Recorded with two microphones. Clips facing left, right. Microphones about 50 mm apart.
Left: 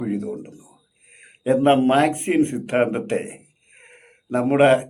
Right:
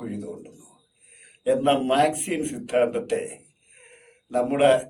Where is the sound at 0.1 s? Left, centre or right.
Left.